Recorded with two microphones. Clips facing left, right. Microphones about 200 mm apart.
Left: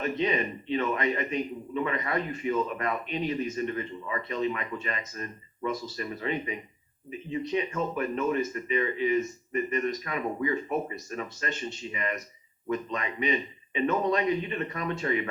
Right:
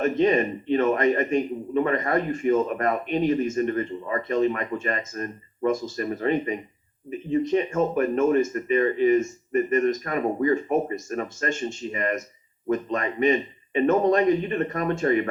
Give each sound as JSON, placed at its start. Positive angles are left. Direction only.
{"t": 0.0, "sound": "a man's voice", "side_deg": -45}